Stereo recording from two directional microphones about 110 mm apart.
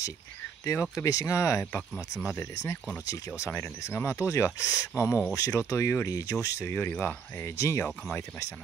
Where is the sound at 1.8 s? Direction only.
Centre (ahead or behind).